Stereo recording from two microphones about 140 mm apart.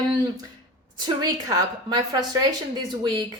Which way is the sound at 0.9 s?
30° right (ahead or behind).